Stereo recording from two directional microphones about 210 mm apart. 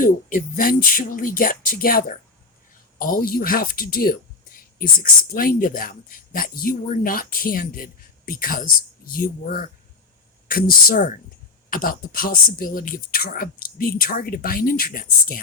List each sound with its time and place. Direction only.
0.0 s speech: 40° left (ahead or behind)